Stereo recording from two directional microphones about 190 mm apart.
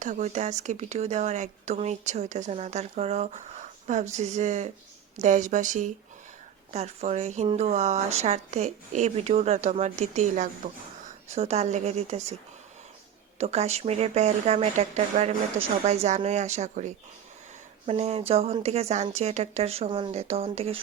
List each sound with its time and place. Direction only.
0.0 s speech: 40° right (ahead or behind)
13.4 s speech: 35° right (ahead or behind)